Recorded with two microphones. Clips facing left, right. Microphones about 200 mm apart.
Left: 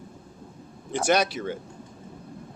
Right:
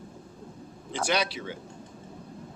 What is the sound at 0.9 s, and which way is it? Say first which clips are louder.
Speech: left 5 dB; 45° left (ahead or behind).